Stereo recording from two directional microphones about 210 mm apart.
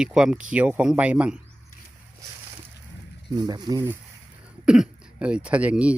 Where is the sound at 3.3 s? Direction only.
20° right (ahead or behind).